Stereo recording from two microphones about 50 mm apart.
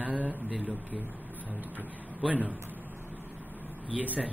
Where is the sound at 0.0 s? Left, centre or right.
Right.